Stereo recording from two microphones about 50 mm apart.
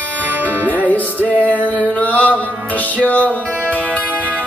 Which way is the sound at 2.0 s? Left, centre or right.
Left.